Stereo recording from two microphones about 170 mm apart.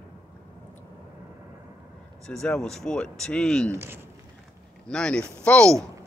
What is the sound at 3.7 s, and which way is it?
Speech, 15° right (ahead or behind).